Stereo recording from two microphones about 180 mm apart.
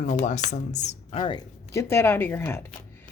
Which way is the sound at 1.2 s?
25° left (ahead or behind).